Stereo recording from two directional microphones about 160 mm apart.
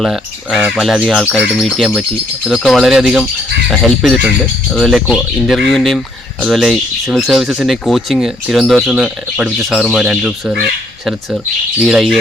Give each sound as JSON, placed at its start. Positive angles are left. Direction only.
{"t": 0.0, "sound": "speech", "side_deg": 0}